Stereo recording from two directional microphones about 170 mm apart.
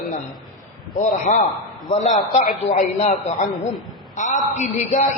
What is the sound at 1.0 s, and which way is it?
A woman's voice, 50° left (ahead or behind).